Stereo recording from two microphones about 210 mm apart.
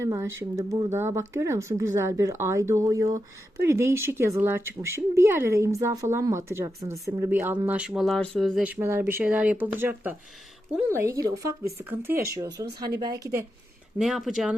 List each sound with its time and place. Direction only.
0.0 s speech: 10° right (ahead or behind)
14.0 s speech: centre (ahead or behind)